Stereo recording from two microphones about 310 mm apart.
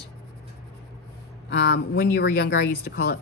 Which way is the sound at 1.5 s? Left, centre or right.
Left.